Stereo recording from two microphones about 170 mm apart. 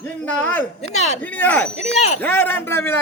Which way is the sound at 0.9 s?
40° left (ahead or behind).